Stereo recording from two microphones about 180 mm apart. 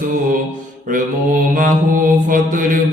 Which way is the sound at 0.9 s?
50° right (ahead or behind).